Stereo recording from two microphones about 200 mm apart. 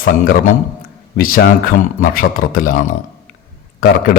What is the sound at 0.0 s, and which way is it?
A man's voice, 40° left (ahead or behind).